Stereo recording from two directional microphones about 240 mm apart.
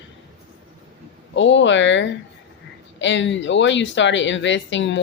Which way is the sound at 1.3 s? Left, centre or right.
Left.